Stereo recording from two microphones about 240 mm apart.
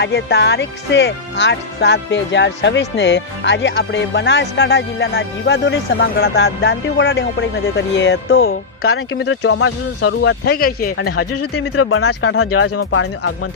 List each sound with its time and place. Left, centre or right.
0.0 s speech: left
11.2 s speech: left